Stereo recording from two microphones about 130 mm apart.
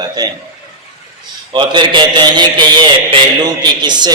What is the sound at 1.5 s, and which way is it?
A man's voice, 40° right (ahead or behind).